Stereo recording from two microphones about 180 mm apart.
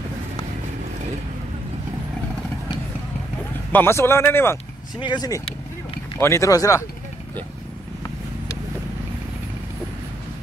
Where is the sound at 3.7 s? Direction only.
15° left (ahead or behind).